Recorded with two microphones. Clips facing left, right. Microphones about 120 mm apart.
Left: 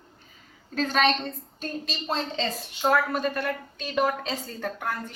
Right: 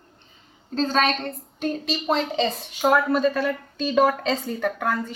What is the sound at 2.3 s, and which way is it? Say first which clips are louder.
Speech: right 6 dB; 15° right (ahead or behind).